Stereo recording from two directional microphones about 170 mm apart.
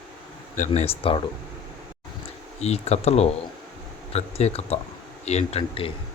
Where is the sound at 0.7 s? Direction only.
35° left (ahead or behind).